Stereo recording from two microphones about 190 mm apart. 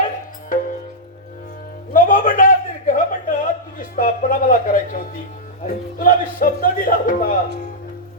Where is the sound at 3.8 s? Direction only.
45° left (ahead or behind).